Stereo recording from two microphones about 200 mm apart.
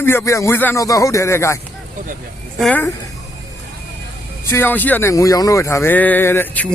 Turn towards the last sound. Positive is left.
turn(degrees=10)  # may be behind; listen again after turning